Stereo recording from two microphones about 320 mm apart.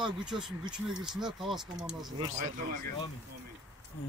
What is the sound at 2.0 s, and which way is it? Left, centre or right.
Speech, centre.